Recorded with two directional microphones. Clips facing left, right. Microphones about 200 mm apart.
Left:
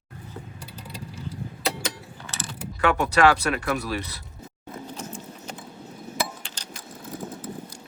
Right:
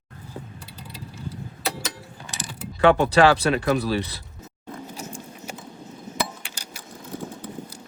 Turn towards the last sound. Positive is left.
turn(degrees=-10)  # may be behind; listen again after turning